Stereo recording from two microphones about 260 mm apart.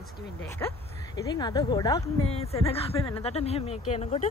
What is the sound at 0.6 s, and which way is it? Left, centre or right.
Speech, centre.